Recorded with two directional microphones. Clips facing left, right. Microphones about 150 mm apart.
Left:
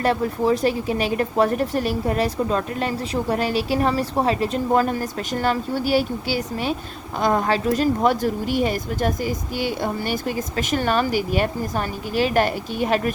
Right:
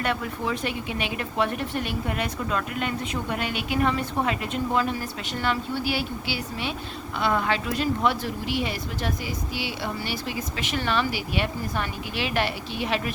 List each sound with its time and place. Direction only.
0.0 s speech: 35° left (ahead or behind)